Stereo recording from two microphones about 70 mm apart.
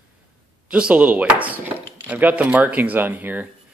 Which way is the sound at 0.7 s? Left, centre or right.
Centre.